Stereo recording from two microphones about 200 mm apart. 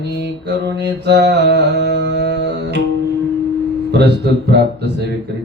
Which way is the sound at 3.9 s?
55° right (ahead or behind).